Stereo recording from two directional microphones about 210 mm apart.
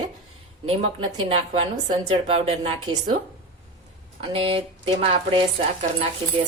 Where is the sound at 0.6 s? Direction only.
25° right (ahead or behind).